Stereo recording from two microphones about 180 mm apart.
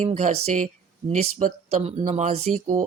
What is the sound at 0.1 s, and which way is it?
Speech, 35° right (ahead or behind).